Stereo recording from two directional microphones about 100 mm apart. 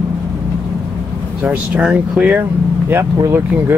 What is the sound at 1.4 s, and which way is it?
Speech, 10° right (ahead or behind).